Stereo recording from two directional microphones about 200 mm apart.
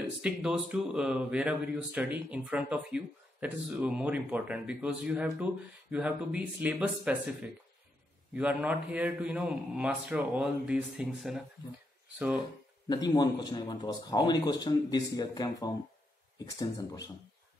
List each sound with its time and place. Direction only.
0.2 s speech: 5° right (ahead or behind)
8.4 s a man's voice: 5° right (ahead or behind)
12.8 s speech: 20° left (ahead or behind)